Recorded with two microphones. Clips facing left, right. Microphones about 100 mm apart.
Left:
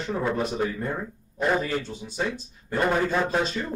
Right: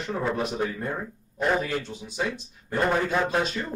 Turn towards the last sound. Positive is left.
turn(degrees=0)  # may be behind; listen again after turning